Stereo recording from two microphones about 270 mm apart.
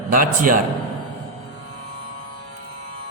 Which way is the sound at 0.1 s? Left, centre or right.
Right.